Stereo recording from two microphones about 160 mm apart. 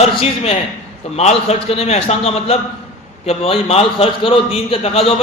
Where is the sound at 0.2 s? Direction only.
35° left (ahead or behind).